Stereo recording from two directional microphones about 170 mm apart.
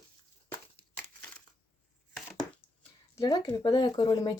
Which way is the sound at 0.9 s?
10° left (ahead or behind).